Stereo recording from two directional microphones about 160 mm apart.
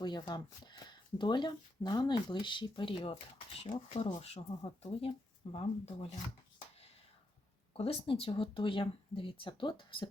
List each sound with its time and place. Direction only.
0.0 s speech: 25° left (ahead or behind)
7.7 s speech: 35° left (ahead or behind)